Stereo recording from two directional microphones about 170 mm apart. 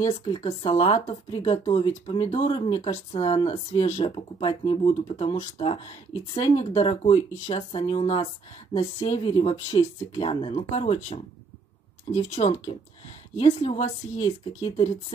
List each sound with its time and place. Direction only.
0.0 s speech: 25° left (ahead or behind)